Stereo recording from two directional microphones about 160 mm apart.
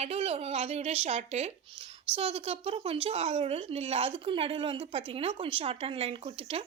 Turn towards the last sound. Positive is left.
turn(degrees=-35)  # may be behind; listen again after turning